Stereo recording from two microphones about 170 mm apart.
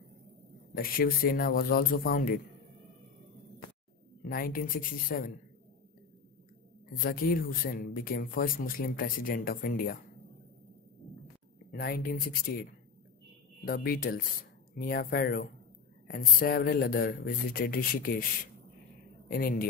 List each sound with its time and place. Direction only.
0.7 s speech: 60° left (ahead or behind)
4.3 s speech: 55° left (ahead or behind)
7.0 s speech: 60° left (ahead or behind)
11.7 s speech: 65° left (ahead or behind)
13.7 s speech: 60° left (ahead or behind)
16.1 s speech: 60° left (ahead or behind)